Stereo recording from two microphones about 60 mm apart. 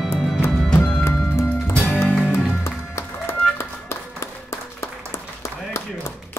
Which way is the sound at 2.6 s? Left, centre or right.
Left.